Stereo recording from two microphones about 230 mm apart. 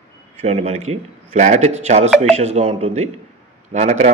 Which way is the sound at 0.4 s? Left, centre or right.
Right.